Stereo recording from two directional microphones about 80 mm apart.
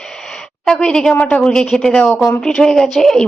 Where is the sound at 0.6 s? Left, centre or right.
Centre.